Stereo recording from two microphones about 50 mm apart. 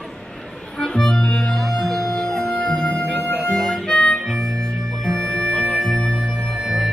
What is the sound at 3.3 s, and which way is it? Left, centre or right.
Harmonica, centre.